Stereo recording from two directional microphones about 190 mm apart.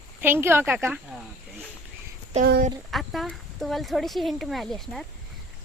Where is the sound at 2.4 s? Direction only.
55° right (ahead or behind).